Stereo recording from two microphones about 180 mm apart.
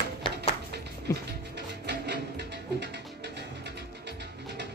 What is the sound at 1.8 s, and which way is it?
Music, 70° right (ahead or behind).